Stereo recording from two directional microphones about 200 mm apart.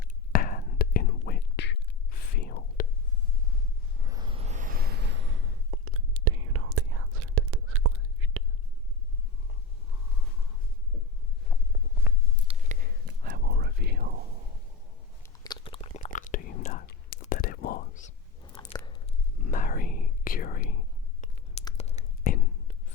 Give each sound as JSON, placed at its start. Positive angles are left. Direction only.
{"t": 0.0, "sound": "whispering", "side_deg": 45}
{"t": 4.0, "sound": "a sound", "side_deg": -20}
{"t": 12.5, "sound": "a sound", "side_deg": -40}
{"t": 13.2, "sound": "whispering", "side_deg": -55}
{"t": 15.2, "sound": "biting", "side_deg": 25}
{"t": 16.1, "sound": "whispering", "side_deg": 40}
{"t": 18.6, "sound": "biting", "side_deg": 20}
{"t": 19.4, "sound": "whispering", "side_deg": 40}